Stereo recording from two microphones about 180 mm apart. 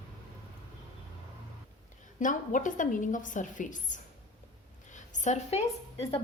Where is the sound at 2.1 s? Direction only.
45° left (ahead or behind).